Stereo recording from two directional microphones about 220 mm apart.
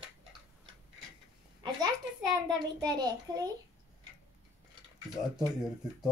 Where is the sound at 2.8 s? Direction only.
20° right (ahead or behind).